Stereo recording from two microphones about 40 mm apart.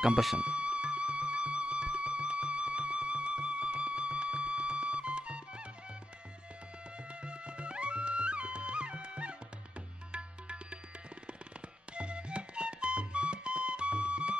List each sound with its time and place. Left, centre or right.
0.0 s speech: centre
0.4 s music: right
7.2 s music: right
11.9 s music: right